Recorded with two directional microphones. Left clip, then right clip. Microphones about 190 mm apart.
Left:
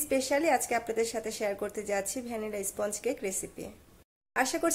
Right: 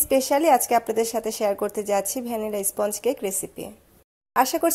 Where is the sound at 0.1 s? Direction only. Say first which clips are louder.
Right 8 dB; 30° right (ahead or behind).